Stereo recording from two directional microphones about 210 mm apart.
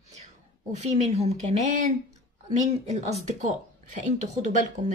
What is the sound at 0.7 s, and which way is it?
Speech, 35° right (ahead or behind).